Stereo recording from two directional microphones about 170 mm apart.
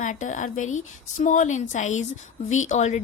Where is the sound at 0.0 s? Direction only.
45° left (ahead or behind).